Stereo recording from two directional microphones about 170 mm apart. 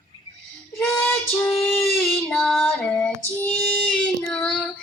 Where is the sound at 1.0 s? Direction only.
15° left (ahead or behind).